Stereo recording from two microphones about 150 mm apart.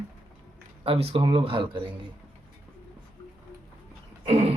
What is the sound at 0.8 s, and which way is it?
Speech, 40° right (ahead or behind).